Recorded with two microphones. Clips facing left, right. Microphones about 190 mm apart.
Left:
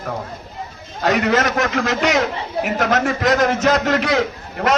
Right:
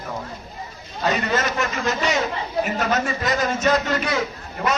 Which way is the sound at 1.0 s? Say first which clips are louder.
Left 5 dB; 75° left (ahead or behind).